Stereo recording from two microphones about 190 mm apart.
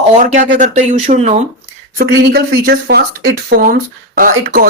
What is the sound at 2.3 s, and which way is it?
Speech, 55° right (ahead or behind).